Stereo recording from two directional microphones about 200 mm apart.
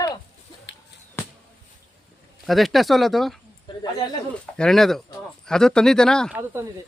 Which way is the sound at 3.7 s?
25° left (ahead or behind).